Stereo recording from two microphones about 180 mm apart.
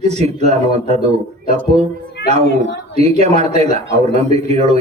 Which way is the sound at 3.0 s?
35° right (ahead or behind).